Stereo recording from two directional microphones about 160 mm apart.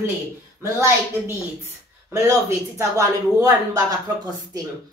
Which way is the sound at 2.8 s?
20° right (ahead or behind).